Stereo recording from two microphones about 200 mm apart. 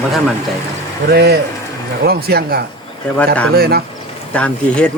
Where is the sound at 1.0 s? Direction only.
55° right (ahead or behind).